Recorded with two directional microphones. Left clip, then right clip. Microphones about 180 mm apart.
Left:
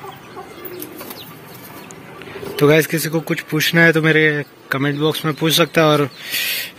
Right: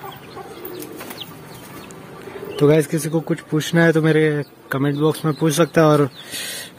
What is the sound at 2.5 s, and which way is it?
A man's voice, 10° right (ahead or behind).